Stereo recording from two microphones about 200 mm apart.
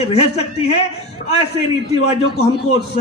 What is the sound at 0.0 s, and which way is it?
Speech, 30° left (ahead or behind).